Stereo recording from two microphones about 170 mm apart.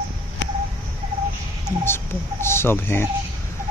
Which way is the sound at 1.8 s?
15° left (ahead or behind).